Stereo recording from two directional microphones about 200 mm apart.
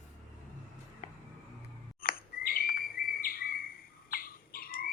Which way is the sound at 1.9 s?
50° left (ahead or behind).